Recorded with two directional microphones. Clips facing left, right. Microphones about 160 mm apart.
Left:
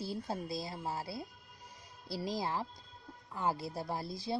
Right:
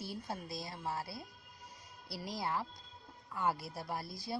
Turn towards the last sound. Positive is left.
turn(degrees=25)  # may be behind; listen again after turning